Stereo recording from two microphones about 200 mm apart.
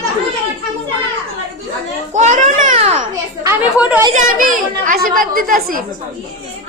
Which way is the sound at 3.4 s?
10° right (ahead or behind).